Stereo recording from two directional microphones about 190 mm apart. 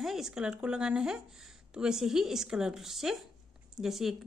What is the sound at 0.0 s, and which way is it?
A woman's voice, centre (ahead or behind).